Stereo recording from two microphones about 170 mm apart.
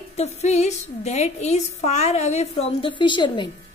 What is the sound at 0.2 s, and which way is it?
A woman's voice, 40° left (ahead or behind).